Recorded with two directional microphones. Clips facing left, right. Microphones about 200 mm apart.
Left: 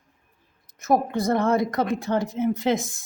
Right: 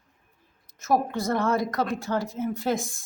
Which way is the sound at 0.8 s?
15° left (ahead or behind).